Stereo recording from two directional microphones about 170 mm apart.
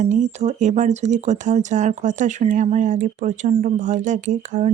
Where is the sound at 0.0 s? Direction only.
45° right (ahead or behind).